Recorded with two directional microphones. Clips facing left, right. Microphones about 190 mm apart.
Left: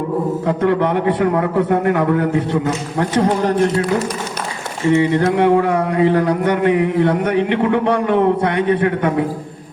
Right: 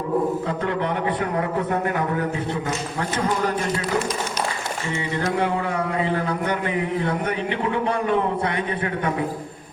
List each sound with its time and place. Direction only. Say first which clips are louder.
0.4 s speech: left 8 dB; 65° left (ahead or behind)
3.0 s speech: left 8 dB; 60° left (ahead or behind)
4.9 s speech: left 12 dB; 65° left (ahead or behind)